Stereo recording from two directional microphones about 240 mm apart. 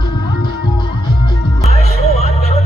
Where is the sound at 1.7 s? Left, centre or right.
Left.